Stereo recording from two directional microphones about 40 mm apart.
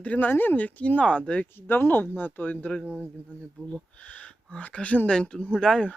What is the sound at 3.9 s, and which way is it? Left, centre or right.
Speech, left.